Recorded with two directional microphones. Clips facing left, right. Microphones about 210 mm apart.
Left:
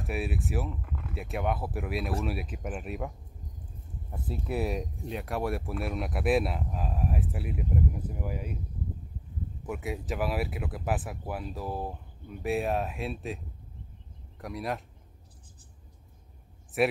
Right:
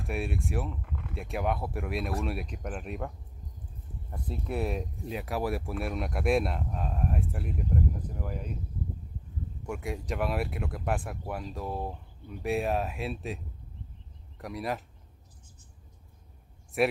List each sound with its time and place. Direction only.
0.0 s speech: centre (ahead or behind)
4.1 s speech: 5° left (ahead or behind)
9.6 s speech: 5° left (ahead or behind)
14.4 s speech: centre (ahead or behind)
16.8 s speech: centre (ahead or behind)